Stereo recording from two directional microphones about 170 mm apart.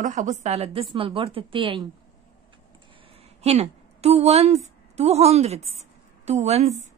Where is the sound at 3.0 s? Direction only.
35° right (ahead or behind).